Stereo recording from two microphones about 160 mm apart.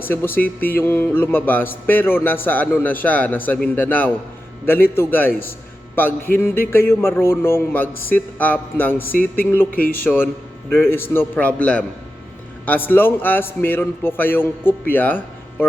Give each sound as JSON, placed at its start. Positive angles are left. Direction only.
{"t": 0.0, "sound": "a man's voice", "side_deg": 15}